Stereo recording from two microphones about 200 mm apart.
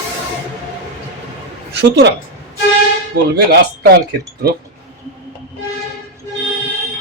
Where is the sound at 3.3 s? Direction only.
55° right (ahead or behind).